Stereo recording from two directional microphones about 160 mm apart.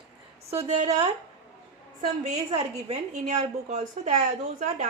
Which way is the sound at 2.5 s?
45° right (ahead or behind).